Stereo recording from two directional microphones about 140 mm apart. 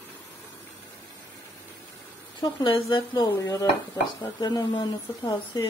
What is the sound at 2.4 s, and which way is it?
Speech, 35° left (ahead or behind).